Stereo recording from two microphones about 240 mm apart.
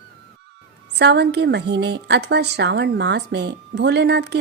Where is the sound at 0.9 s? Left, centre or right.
Right.